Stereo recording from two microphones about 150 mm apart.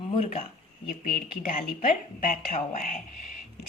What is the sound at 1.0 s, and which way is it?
A woman's voice, 65° left (ahead or behind).